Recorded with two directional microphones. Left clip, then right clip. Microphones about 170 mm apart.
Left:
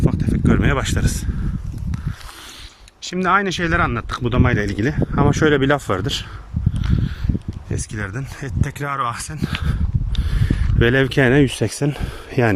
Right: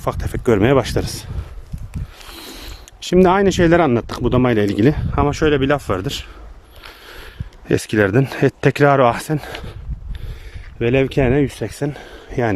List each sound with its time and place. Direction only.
0.0 s speech: 40° right (ahead or behind)
3.0 s speech: 40° right (ahead or behind); by 5.2 s 20° right (ahead or behind)
5.2 s speech: 5° right (ahead or behind)
7.7 s speech: 55° right (ahead or behind)
10.4 s speech: 10° right (ahead or behind)
11.4 s speech: 15° left (ahead or behind)